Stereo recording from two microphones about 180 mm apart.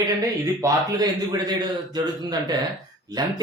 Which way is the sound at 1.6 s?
20° right (ahead or behind).